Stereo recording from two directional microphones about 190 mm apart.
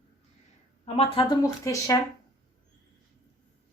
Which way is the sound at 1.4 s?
15° left (ahead or behind).